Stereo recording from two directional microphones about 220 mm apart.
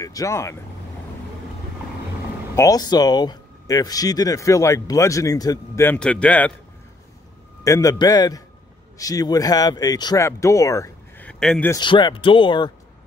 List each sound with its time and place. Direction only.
0.0 s speech: 15° left (ahead or behind)
2.5 s speech: 15° left (ahead or behind)
7.6 s speech: 15° left (ahead or behind)
11.7 s speech: 20° left (ahead or behind)